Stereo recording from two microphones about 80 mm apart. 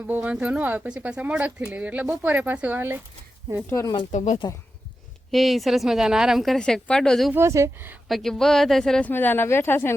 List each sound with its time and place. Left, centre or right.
0.1 s speech: centre
3.7 s speech: left
5.3 s speech: centre
6.6 s a woman's voice: centre
7.3 s speech: right
8.0 s speech: centre
9.0 s speech: left